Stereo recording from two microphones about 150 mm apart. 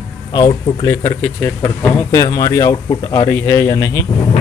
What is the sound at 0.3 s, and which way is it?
Speech, 30° left (ahead or behind).